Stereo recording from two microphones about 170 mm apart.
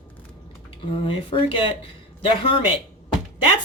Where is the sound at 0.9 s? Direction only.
30° left (ahead or behind).